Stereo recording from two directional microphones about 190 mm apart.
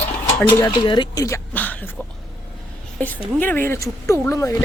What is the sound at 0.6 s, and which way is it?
Speech, 20° left (ahead or behind).